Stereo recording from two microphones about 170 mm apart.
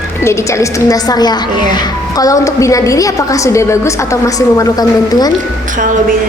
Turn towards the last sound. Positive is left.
turn(degrees=25)  # may be behind; listen again after turning